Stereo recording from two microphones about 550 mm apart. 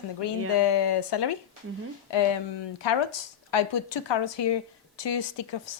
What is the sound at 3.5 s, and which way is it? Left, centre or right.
A woman's voice, left.